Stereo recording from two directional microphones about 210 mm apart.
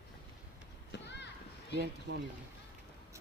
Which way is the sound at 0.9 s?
55° left (ahead or behind).